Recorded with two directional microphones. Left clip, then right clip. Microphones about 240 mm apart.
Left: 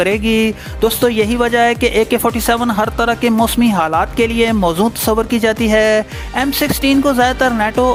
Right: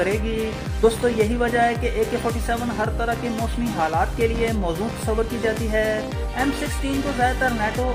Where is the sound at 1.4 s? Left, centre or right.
Left.